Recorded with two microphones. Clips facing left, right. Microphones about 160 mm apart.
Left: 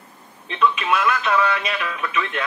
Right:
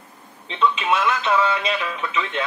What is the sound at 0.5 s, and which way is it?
A woman's voice, 25° right (ahead or behind).